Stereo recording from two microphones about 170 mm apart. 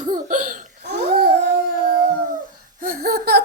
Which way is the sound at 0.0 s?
50° right (ahead or behind).